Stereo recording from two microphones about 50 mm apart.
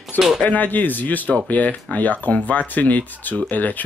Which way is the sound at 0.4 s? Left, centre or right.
Left.